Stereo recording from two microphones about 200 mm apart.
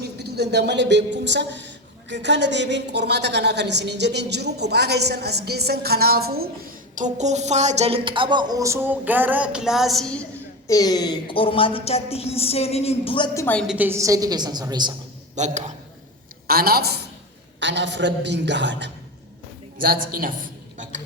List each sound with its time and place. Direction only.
0.2 s a woman's voice: 55° right (ahead or behind)
6.9 s speech: 35° right (ahead or behind); by 10.2 s 5° left (ahead or behind)
10.7 s a woman's voice: 20° left (ahead or behind)
13.7 s a woman's voice: 10° right (ahead or behind)
15.4 s a man's voice: 35° right (ahead or behind)
16.5 s a woman's voice: 50° right (ahead or behind)
19.8 s a man's voice: 45° right (ahead or behind)